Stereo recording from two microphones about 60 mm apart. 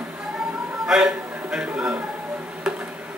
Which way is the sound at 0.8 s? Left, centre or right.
Centre.